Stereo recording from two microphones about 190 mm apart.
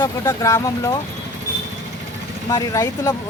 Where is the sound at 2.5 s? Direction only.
15° left (ahead or behind).